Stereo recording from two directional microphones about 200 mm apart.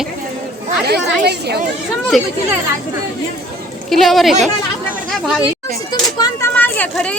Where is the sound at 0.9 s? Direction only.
55° right (ahead or behind).